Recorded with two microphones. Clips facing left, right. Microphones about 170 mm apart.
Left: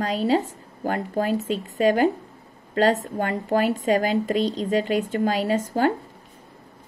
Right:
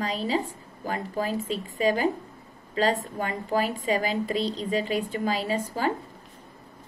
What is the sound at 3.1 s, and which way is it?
A woman's voice, 50° left (ahead or behind).